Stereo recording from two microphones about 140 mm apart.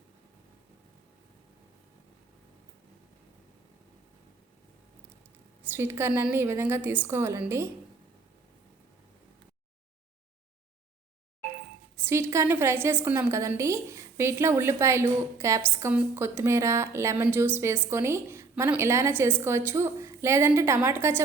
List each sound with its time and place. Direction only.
5.7 s a woman's voice: 15° right (ahead or behind)
12.0 s a woman's voice: 20° right (ahead or behind)